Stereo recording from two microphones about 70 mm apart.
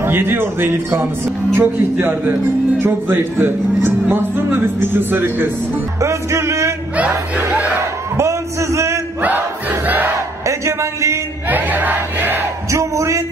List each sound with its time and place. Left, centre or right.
0.0 s speech: right
5.9 s music: right
7.0 s speech: right
7.5 s crowd: right
8.2 s a sound: right
9.2 s battle cry: right
10.4 s a sound: right
11.4 s battle cry: right
12.7 s music: right